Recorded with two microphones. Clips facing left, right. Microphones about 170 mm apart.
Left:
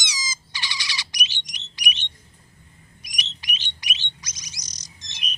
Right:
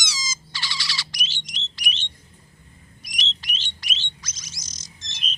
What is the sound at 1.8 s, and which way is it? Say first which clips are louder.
Alarm: left 3 dB; 15° left (ahead or behind).